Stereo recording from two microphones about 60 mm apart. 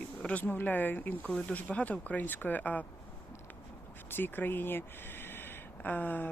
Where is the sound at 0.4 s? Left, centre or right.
Left.